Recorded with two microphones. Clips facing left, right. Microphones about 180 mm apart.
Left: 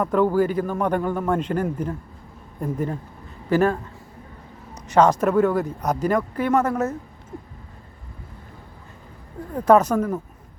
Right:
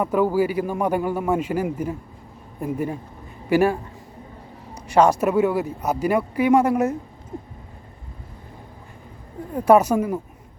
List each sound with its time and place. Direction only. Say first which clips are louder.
0.0 s speech: even; 10° right (ahead or behind)
7.3 s a sound: right 3 dB; 25° right (ahead or behind)
9.6 s speech: right 1 dB; 10° right (ahead or behind)